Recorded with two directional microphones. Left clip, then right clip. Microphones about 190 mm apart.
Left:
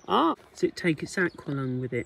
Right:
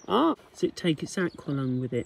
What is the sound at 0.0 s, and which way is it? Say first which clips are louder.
Speech: left 1 dB; 15° right (ahead or behind).